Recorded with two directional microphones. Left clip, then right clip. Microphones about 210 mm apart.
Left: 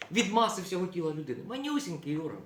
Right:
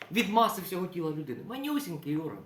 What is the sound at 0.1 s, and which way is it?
A man's voice, 10° right (ahead or behind).